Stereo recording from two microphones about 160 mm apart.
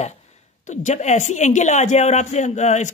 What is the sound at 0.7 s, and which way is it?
Speech, 45° left (ahead or behind).